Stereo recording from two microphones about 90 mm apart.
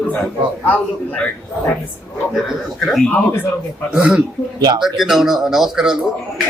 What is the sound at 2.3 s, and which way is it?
Speech, centre (ahead or behind).